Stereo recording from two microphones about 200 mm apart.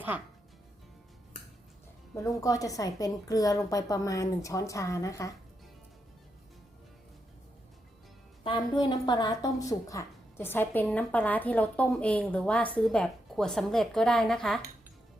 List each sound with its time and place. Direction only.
0.1 s speech: 10° right (ahead or behind)
2.1 s speech: 15° left (ahead or behind)
8.4 s speech: 20° left (ahead or behind); by 14.6 s centre (ahead or behind)